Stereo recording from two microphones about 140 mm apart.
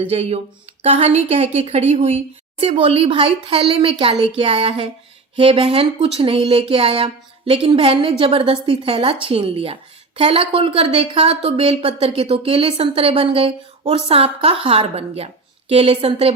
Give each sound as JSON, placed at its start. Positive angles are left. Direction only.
{"t": 0.0, "sound": "a woman's voice", "side_deg": -45}